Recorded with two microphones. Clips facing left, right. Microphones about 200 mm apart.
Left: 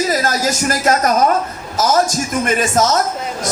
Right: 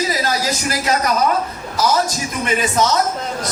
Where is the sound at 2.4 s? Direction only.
45° left (ahead or behind).